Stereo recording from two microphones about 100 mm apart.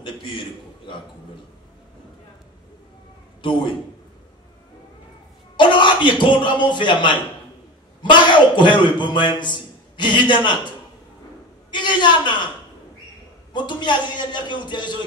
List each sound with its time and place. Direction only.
0.0 s a man's voice: 60° left (ahead or behind)
5.6 s a man's voice: 50° left (ahead or behind)
11.7 s a sound: 50° left (ahead or behind)
13.5 s a man's voice: 50° left (ahead or behind)